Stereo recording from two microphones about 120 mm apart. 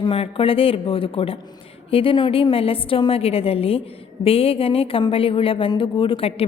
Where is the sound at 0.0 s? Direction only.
50° left (ahead or behind).